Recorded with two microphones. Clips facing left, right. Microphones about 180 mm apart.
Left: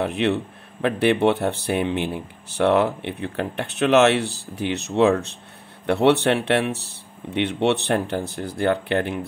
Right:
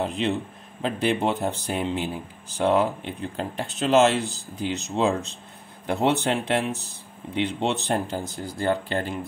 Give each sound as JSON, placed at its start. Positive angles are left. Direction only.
{"t": 0.0, "sound": "speech", "side_deg": 65}